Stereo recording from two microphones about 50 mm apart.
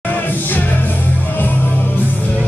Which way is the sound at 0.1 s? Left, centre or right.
Left.